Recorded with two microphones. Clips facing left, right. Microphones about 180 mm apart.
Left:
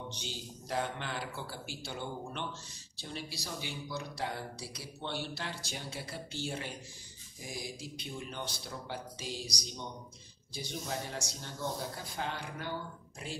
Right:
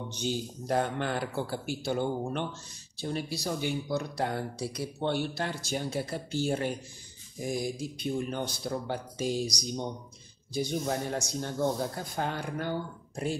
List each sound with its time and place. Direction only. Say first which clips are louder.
0.1 s speech: right 11 dB; 50° right (ahead or behind)
10.5 s speech: right 9 dB; 50° right (ahead or behind)